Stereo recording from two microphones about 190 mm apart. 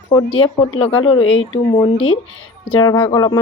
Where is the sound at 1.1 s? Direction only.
90° left.